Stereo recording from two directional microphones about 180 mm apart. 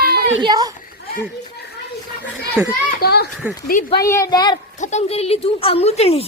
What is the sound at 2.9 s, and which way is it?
Speech, 60° left (ahead or behind).